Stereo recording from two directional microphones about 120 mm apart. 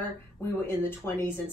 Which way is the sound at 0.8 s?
20° left (ahead or behind).